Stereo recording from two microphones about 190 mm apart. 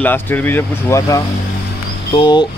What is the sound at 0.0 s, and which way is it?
Speech, 10° left (ahead or behind).